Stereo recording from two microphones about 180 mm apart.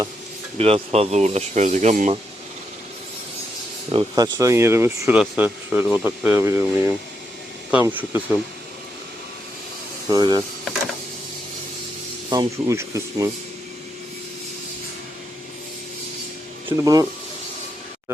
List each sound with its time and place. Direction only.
0.6 s speech: 35° right (ahead or behind)
3.9 s speech: 20° right (ahead or behind)
10.1 s speech: 25° right (ahead or behind)
12.3 s speech: 20° right (ahead or behind)
16.6 s speech: 20° right (ahead or behind)